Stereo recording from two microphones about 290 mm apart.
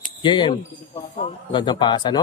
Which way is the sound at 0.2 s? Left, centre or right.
Centre.